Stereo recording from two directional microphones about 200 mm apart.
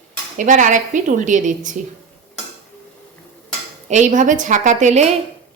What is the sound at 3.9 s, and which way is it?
Speech, 40° right (ahead or behind).